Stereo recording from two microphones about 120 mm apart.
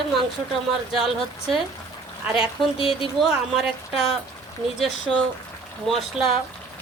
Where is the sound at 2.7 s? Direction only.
50° left (ahead or behind).